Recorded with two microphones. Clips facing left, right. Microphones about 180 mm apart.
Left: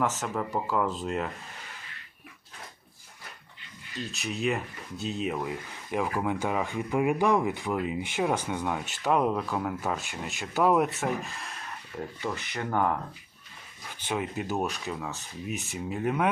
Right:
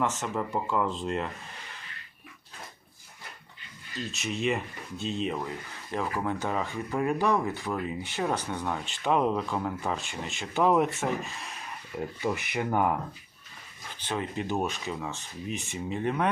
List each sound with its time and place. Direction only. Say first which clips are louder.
0.0 s speech: even; centre (ahead or behind)
4.0 s speech: even; centre (ahead or behind)
12.2 s speech: right 4 dB; 15° right (ahead or behind)
14.0 s speech: left 1 dB; 10° left (ahead or behind)